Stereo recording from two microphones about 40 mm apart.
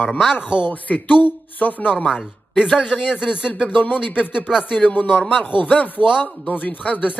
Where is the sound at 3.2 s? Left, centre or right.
Right.